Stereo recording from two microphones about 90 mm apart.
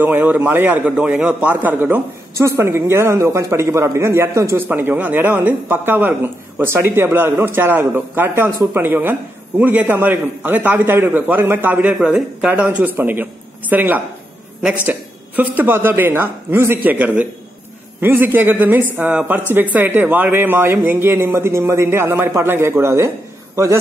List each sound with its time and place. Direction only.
0.0 s speech: 20° right (ahead or behind)
4.6 s a woman's voice: 20° right (ahead or behind)